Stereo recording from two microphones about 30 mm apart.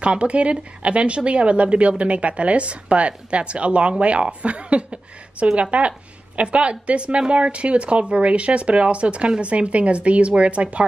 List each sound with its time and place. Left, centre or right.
0.0 s a woman's voice: right